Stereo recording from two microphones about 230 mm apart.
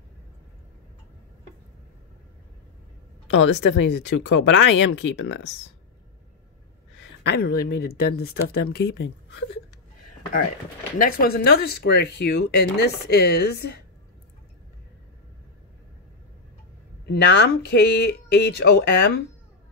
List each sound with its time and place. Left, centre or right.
3.3 s speech: left
7.2 s speech: left
11.0 s speech: left
17.0 s speech: left